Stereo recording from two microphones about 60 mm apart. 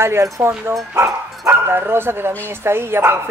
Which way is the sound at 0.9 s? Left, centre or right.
Right.